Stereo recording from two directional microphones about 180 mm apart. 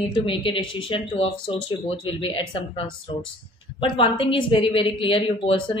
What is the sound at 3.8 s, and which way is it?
A woman's voice, 30° left (ahead or behind).